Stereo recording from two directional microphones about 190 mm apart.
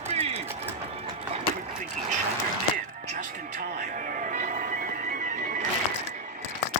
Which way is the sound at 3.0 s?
40° right (ahead or behind).